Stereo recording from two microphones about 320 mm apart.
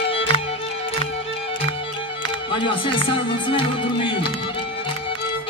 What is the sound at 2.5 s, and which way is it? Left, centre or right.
Music, centre.